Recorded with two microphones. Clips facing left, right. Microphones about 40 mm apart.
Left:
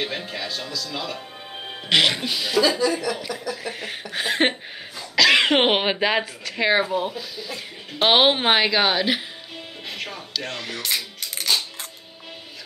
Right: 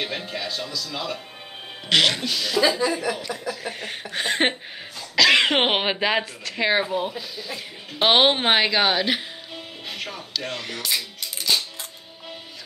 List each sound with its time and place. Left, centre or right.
0.0 s speech: centre
1.9 s speech: centre
2.8 s speech: right
3.6 s speech: centre
9.8 s music: centre
10.3 s speech: centre